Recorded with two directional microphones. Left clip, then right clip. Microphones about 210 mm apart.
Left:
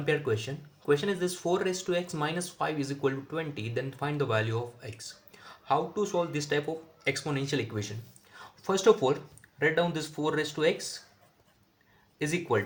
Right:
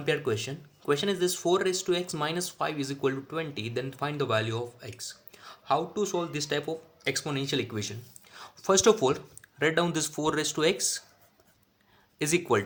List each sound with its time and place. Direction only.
0.0 s speech: 25° right (ahead or behind)
12.2 s speech: 35° right (ahead or behind)